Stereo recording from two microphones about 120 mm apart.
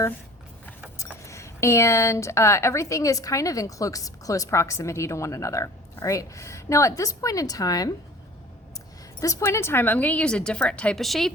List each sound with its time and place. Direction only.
0.9 s speech: 25° left (ahead or behind)
9.2 s speech: 25° left (ahead or behind); by 11.3 s centre (ahead or behind)